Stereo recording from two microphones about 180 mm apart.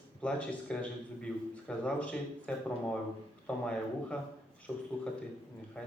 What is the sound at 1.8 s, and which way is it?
Speech, 5° left (ahead or behind).